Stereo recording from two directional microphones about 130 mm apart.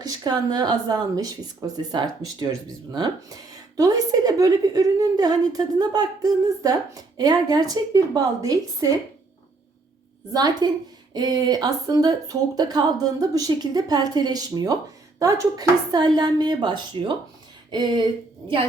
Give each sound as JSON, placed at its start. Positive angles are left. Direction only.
{"t": 0.0, "sound": "speech", "side_deg": -30}
{"t": 10.3, "sound": "speech", "side_deg": -30}
{"t": 17.7, "sound": "a sound", "side_deg": -35}